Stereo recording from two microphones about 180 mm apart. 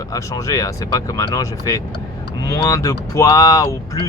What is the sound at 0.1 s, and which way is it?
Speech, 20° left (ahead or behind).